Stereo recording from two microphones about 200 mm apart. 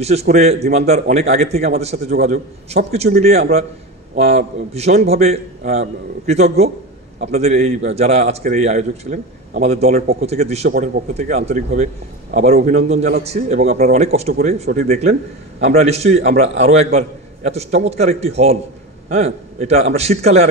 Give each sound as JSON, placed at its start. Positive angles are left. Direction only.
{"t": 0.0, "sound": "a man's voice", "side_deg": -30}